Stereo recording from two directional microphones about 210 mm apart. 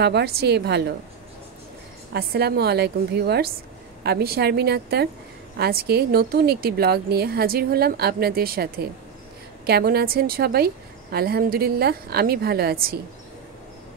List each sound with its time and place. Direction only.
0.0 s a woman's voice: 50° right (ahead or behind)
2.1 s a woman's voice: 50° right (ahead or behind)